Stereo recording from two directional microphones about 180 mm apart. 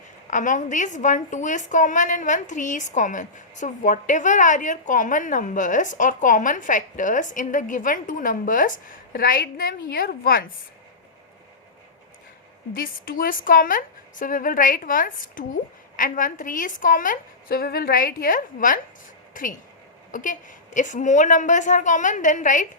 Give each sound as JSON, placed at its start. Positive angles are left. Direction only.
{"t": 0.3, "sound": "a woman's voice", "side_deg": 45}
{"t": 12.7, "sound": "a woman's voice", "side_deg": 55}